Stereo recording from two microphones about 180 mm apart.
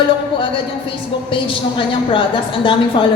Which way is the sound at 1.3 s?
30° left (ahead or behind).